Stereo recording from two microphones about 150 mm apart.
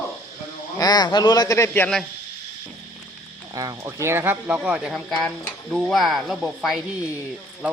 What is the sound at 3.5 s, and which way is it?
A man's voice, 25° right (ahead or behind).